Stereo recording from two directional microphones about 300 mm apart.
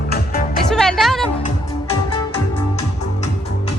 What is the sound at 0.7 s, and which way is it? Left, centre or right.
Music, centre.